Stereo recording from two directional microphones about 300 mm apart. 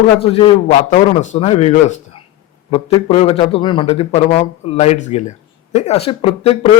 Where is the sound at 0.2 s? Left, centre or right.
Centre.